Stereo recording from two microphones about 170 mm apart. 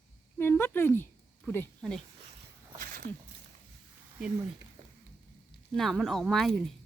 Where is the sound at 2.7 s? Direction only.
60° right (ahead or behind).